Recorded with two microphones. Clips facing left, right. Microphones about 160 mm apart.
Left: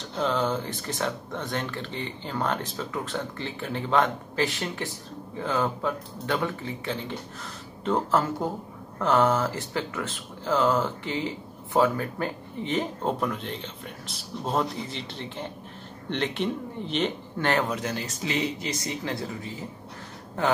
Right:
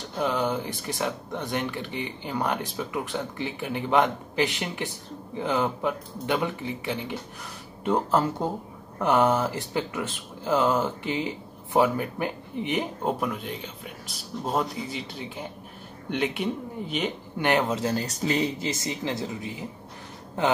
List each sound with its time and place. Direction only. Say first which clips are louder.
0.2 s speech: even; 10° right (ahead or behind)